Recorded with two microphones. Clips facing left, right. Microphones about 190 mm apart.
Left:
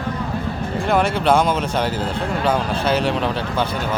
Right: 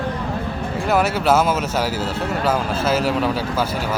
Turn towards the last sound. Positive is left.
turn(degrees=-5)  # may be behind; listen again after turning